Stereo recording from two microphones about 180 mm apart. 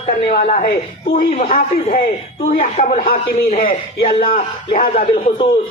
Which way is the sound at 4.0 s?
30° left (ahead or behind).